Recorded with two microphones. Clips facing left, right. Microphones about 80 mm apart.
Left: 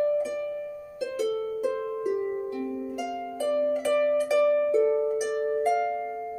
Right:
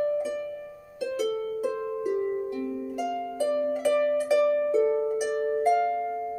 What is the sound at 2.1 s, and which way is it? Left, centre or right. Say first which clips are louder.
Harp: right 2 dB; centre.